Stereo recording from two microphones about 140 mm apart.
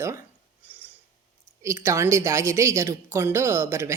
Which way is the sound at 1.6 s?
20° right (ahead or behind).